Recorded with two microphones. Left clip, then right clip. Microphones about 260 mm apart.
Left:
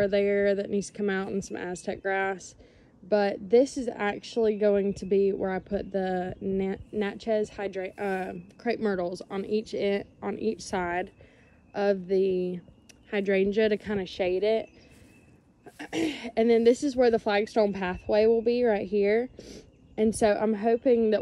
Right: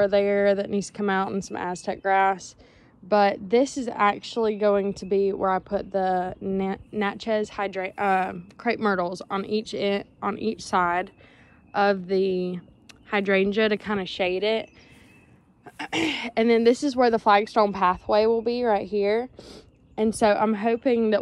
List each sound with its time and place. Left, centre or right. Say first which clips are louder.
0.0 s speech: right 4 dB; centre
15.8 s speech: right 5 dB; centre